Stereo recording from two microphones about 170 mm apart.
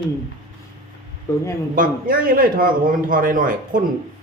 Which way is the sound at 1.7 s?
55° right (ahead or behind).